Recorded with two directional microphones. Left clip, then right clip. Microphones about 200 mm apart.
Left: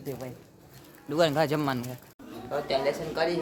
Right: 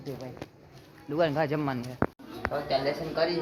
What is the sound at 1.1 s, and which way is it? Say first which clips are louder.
Speech: left 2 dB; 15° left (ahead or behind).